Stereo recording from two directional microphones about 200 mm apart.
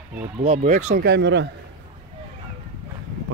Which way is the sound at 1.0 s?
60° right (ahead or behind).